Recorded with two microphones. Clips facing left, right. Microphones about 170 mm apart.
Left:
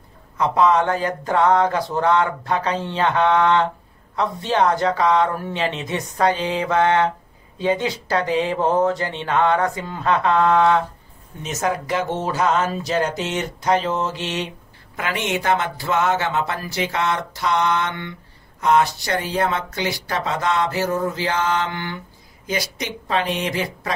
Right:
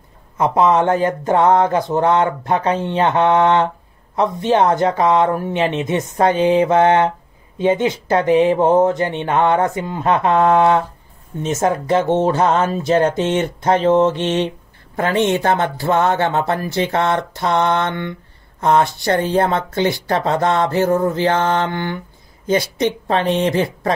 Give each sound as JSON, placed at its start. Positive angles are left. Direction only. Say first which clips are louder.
{"t": 0.4, "sound": "speech", "louder": "right 3 dB", "side_deg": -20}
{"t": 11.8, "sound": "speech", "louder": "right 8 dB", "side_deg": -25}
{"t": 15.4, "sound": "speech", "louder": "right 4 dB", "side_deg": -55}